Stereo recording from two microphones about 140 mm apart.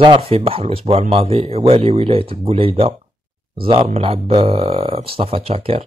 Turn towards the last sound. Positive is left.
turn(degrees=-40)  # may be behind; listen again after turning